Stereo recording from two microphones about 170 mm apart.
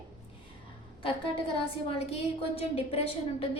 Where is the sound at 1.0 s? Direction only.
30° left (ahead or behind).